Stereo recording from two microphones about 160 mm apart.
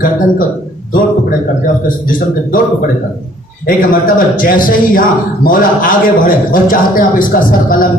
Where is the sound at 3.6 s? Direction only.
60° left (ahead or behind).